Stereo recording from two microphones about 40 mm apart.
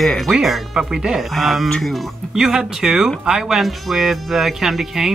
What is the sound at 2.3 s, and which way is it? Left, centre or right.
Speech, centre.